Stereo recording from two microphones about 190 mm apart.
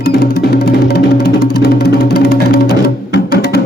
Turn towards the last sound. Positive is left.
turn(degrees=60)  # may be behind; listen again after turning